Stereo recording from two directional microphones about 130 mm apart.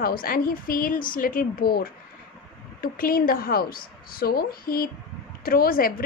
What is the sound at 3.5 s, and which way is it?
Speech, 90° left.